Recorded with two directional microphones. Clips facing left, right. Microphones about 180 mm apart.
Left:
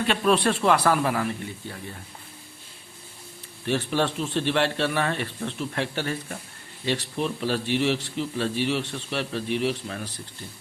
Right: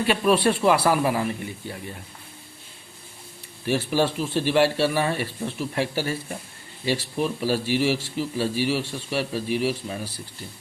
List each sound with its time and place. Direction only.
0.0 s a man's voice: 5° right (ahead or behind)
3.7 s a man's voice: 10° right (ahead or behind)